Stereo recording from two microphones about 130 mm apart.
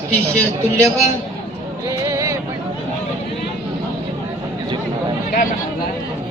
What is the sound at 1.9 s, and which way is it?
Music, 25° right (ahead or behind).